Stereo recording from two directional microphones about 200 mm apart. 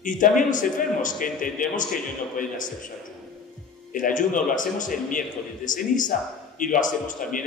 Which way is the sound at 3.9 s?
40° left (ahead or behind).